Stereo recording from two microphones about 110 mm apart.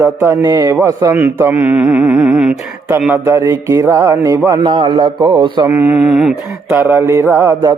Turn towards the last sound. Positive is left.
turn(degrees=-20)  # may be behind; listen again after turning